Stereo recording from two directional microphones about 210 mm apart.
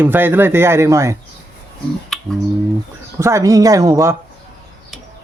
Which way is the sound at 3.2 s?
15° right (ahead or behind).